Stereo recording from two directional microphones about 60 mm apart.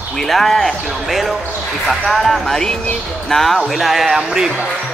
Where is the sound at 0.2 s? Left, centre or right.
Centre.